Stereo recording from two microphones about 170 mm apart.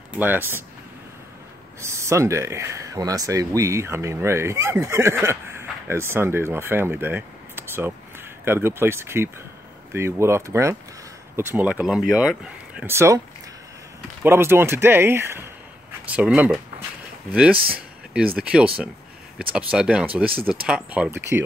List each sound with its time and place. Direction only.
0.2 s speech: 10° right (ahead or behind)
1.8 s speech: 15° right (ahead or behind)
14.2 s speech: 15° right (ahead or behind)